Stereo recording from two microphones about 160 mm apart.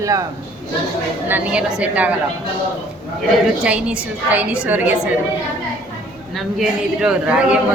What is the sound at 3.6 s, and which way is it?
A man's voice, 5° right (ahead or behind).